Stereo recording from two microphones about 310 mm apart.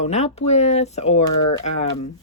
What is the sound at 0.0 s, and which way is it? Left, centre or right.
Speech, left.